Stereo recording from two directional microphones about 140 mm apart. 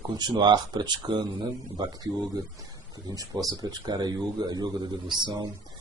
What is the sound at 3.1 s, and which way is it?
A man's voice, 25° right (ahead or behind).